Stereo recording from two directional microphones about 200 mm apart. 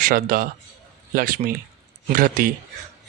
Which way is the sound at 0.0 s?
45° right (ahead or behind).